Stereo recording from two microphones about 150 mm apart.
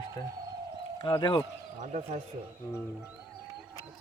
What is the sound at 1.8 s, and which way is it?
Speech, 50° right (ahead or behind).